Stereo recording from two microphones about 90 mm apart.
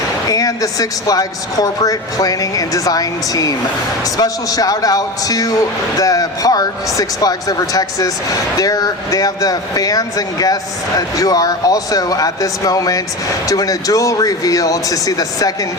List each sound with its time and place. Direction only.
0.3 s speech: 40° left (ahead or behind)